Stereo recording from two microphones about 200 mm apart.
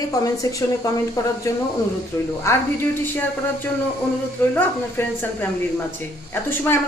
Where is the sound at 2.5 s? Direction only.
15° left (ahead or behind).